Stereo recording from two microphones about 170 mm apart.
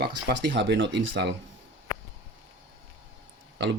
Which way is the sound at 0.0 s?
80° right.